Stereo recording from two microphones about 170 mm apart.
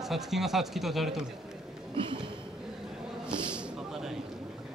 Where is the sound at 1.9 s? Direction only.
30° right (ahead or behind).